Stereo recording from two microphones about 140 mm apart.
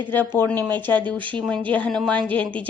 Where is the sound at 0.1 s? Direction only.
15° left (ahead or behind).